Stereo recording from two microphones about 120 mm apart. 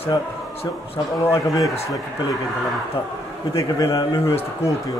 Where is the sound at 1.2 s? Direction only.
20° left (ahead or behind).